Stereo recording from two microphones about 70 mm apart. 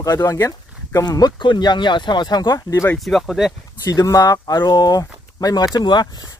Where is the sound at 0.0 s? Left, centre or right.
Left.